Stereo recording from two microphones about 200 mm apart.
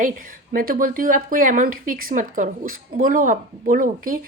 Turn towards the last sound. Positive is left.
turn(degrees=-45)  # may be behind; listen again after turning